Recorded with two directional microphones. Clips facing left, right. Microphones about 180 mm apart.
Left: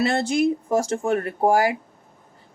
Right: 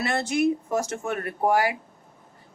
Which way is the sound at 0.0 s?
30° left (ahead or behind).